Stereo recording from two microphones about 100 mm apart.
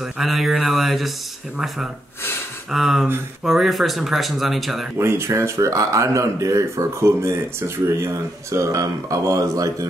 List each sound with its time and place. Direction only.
0.0 s speech: centre (ahead or behind)
2.7 s speech: centre (ahead or behind)
4.9 s speech: 25° right (ahead or behind)